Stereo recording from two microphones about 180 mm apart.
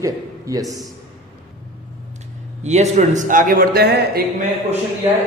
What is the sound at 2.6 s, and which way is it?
A man's voice, 40° right (ahead or behind).